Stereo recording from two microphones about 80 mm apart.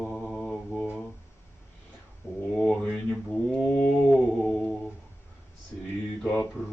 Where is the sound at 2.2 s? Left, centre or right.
Left.